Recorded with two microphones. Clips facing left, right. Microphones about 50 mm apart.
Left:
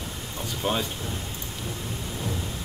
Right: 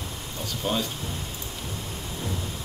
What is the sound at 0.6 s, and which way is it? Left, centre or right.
Speech, left.